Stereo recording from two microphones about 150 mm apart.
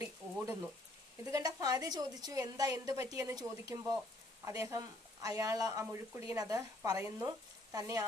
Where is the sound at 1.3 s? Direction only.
25° right (ahead or behind).